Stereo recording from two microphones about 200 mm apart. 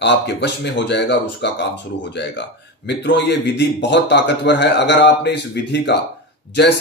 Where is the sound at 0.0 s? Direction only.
60° left (ahead or behind).